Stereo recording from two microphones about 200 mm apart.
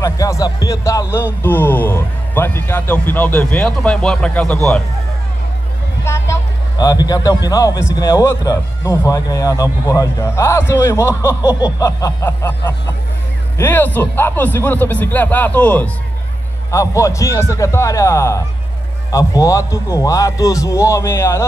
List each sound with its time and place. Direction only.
0.0 s a man's voice: 15° left (ahead or behind)
6.0 s a sound: 15° left (ahead or behind)
7.4 s a man's voice: 15° left (ahead or behind)